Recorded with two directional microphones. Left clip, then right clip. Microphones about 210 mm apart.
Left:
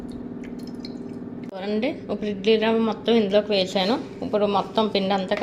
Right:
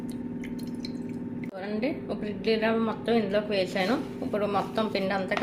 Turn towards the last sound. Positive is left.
turn(degrees=15)  # may be behind; listen again after turning